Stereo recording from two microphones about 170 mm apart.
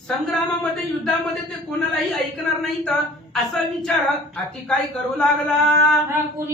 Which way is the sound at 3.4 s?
Centre (ahead or behind).